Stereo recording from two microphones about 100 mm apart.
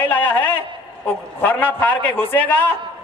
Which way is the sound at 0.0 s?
20° left (ahead or behind).